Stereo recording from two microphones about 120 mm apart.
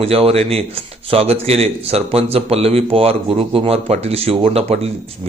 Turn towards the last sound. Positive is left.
turn(degrees=-55)  # may be behind; listen again after turning